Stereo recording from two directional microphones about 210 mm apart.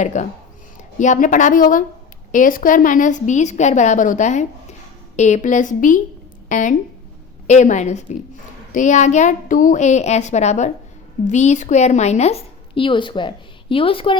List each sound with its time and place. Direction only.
0.0 s a woman's voice: 35° left (ahead or behind)